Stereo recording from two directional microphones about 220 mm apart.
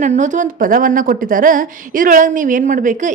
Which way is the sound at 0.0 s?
35° right (ahead or behind).